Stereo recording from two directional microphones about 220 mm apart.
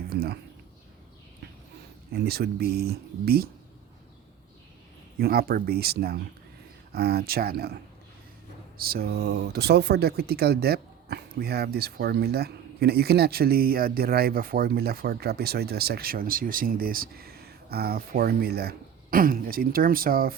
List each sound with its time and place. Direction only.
2.1 s speech: 45° right (ahead or behind)
5.1 s speech: 45° right (ahead or behind)
8.8 s speech: 45° right (ahead or behind)